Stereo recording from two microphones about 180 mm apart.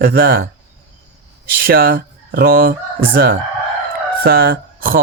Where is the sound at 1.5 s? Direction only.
55° right (ahead or behind).